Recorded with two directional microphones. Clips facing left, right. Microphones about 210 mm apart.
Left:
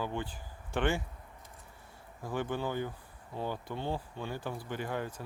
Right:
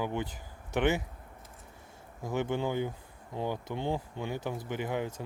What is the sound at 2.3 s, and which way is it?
Speech, 20° right (ahead or behind).